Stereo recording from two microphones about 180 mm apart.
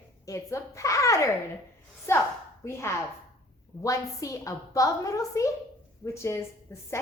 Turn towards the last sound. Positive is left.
turn(degrees=15)  # may be behind; listen again after turning